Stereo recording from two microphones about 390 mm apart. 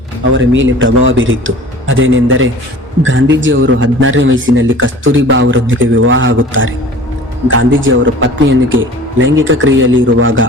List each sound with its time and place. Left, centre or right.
0.3 s speech: right